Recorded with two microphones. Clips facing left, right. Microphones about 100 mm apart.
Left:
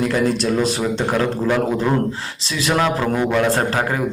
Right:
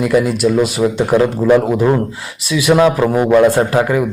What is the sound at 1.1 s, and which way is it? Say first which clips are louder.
A man's voice: right 9 dB; 25° right (ahead or behind).